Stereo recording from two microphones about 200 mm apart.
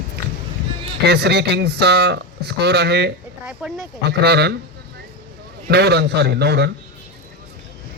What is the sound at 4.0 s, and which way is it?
Speech, 55° right (ahead or behind).